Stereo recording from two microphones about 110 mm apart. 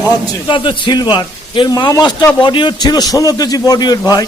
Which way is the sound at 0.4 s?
45° left (ahead or behind).